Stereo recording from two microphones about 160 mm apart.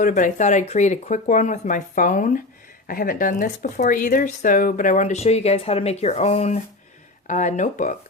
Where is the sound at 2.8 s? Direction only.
65° left (ahead or behind).